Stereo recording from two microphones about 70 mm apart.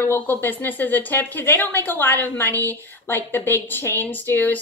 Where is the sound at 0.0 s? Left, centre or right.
Left.